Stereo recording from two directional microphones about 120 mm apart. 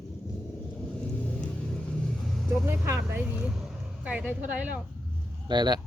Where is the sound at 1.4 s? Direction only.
5° left (ahead or behind).